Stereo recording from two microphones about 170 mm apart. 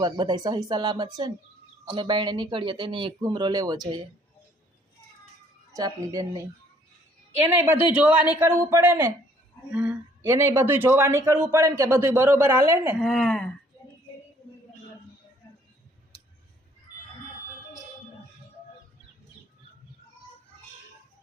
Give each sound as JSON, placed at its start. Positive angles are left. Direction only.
{"t": 0.0, "sound": "speech", "side_deg": -25}
{"t": 5.7, "sound": "speech", "side_deg": -20}
{"t": 7.9, "sound": "speech", "side_deg": -10}
{"t": 13.1, "sound": "speech", "side_deg": 5}